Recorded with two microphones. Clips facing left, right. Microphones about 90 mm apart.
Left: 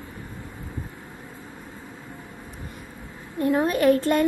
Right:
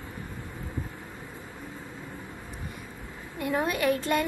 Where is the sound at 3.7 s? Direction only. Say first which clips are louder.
Left 6 dB; 45° left (ahead or behind).